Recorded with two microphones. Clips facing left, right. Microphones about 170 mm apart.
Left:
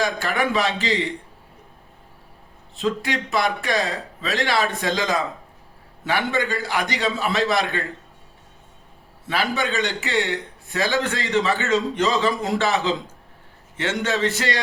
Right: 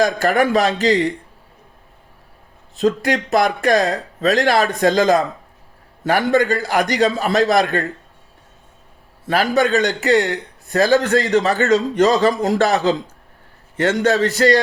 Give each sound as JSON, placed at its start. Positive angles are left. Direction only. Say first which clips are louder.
{"t": 0.2, "sound": "a man's voice", "louder": "right 7 dB", "side_deg": -40}
{"t": 2.7, "sound": "a man's voice", "louder": "right 7 dB", "side_deg": -40}
{"t": 9.2, "sound": "a man's voice", "louder": "right 7 dB", "side_deg": -40}